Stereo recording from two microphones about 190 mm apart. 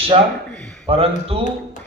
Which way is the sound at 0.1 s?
30° right (ahead or behind).